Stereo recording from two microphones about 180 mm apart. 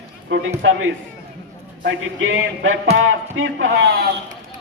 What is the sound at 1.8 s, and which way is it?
Speech, 90° right.